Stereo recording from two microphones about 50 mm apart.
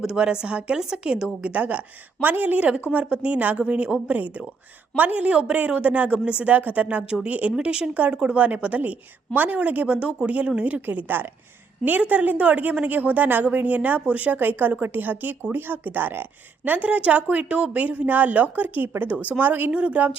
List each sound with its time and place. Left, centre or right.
0.0 s a woman's voice: centre
10.8 s a woman's voice: right